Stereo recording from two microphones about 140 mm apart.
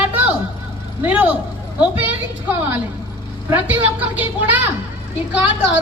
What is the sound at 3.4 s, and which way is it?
A woman's voice, 15° right (ahead or behind).